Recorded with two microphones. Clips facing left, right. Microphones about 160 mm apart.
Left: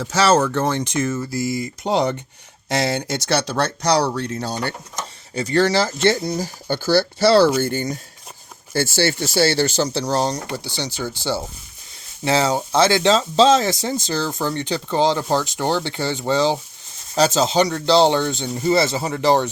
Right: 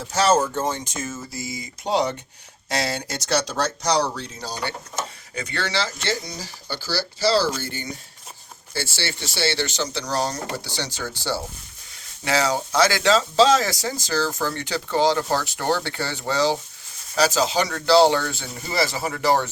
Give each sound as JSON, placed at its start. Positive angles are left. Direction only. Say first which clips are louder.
{"t": 0.0, "sound": "speech", "louder": "left 3 dB", "side_deg": 85}
{"t": 1.6, "sound": "speech", "louder": "even", "side_deg": 55}
{"t": 5.3, "sound": "speech", "louder": "left 11 dB", "side_deg": 35}
{"t": 10.6, "sound": "speech", "louder": "left 3 dB", "side_deg": 15}
{"t": 12.2, "sound": "speech", "louder": "left 3 dB", "side_deg": 25}